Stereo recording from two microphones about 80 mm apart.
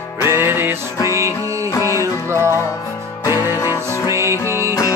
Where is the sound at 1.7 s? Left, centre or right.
Left.